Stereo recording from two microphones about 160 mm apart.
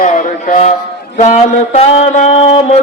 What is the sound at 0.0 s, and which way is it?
Mantra, 55° left (ahead or behind).